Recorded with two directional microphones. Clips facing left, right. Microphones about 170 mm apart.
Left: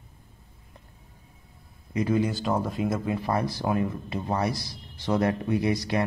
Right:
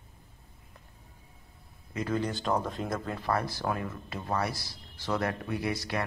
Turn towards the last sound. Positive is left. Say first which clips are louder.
# left 7 dB
turn(degrees=20)  # may be behind; listen again after turning